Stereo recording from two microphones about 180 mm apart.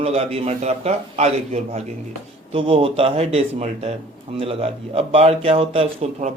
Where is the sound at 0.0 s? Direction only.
35° right (ahead or behind).